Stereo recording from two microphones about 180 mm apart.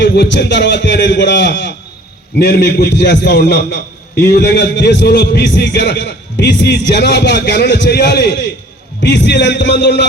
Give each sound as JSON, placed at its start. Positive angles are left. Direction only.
{"t": 0.0, "sound": "a man's voice", "side_deg": 70}